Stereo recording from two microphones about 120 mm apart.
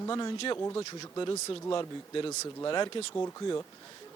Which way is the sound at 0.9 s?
35° left (ahead or behind).